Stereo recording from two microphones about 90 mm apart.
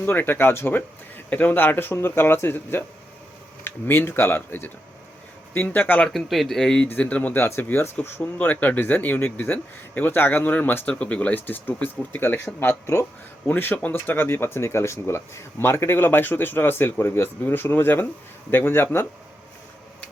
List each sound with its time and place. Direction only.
0.0 s speech: 20° left (ahead or behind)
6.1 s speech: centre (ahead or behind)
6.8 s speech: 15° left (ahead or behind)